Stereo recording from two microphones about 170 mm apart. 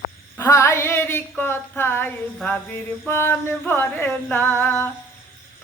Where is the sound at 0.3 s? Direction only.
15° left (ahead or behind).